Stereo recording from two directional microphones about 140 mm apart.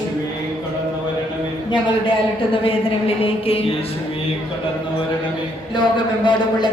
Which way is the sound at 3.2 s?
45° left (ahead or behind).